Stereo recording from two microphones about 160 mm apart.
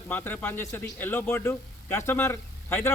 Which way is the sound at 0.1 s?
10° left (ahead or behind).